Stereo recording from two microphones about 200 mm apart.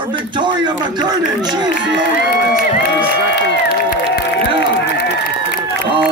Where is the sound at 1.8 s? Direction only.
65° right (ahead or behind).